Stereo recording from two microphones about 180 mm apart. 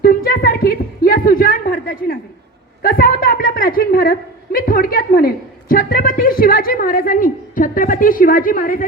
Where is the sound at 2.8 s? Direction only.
55° left (ahead or behind).